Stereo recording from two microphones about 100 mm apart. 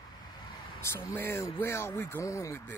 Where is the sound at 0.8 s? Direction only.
25° left (ahead or behind).